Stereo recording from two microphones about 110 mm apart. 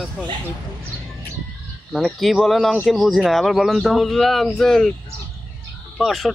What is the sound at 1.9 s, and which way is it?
Speech, centre (ahead or behind).